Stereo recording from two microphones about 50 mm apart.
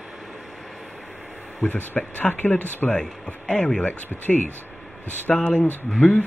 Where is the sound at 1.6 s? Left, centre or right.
Left.